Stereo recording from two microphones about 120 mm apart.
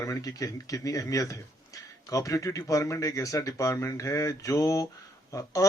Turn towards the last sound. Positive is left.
turn(degrees=30)  # may be behind; listen again after turning